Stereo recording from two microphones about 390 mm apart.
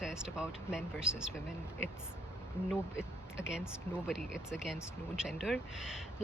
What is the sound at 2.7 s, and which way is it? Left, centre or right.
Speech, centre.